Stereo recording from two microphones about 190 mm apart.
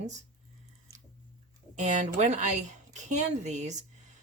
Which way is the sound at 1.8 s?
40° right (ahead or behind).